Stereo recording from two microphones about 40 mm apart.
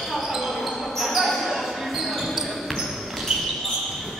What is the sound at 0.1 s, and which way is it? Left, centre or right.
Basketball bounce, centre.